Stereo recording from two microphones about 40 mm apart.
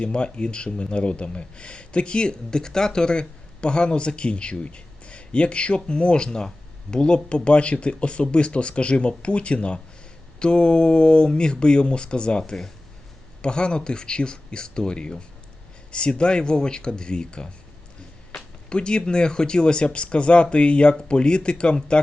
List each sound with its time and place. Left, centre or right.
0.0 s speech: left